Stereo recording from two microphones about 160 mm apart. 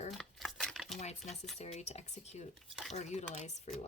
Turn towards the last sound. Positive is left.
turn(degrees=45)  # may be behind; listen again after turning